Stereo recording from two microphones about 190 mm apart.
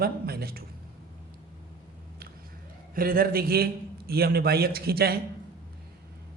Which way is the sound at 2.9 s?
50° right (ahead or behind).